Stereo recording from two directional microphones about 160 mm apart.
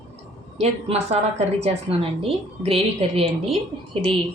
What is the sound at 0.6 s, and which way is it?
A woman's voice, 40° right (ahead or behind).